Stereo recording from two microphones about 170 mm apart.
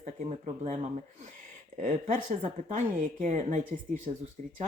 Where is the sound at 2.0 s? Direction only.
45° right (ahead or behind).